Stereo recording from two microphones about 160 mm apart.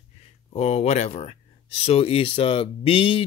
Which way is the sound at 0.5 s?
40° left (ahead or behind).